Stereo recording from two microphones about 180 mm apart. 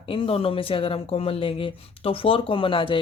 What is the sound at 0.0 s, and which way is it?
A woman's voice, 30° left (ahead or behind).